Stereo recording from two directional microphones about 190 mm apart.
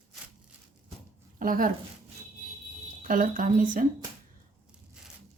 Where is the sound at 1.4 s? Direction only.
45° right (ahead or behind).